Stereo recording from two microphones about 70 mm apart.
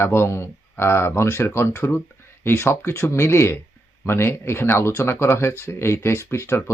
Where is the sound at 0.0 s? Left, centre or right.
Left.